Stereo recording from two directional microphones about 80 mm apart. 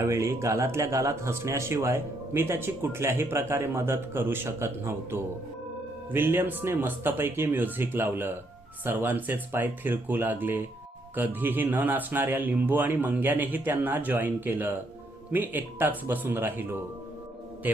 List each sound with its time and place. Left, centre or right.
0.0 s speech: right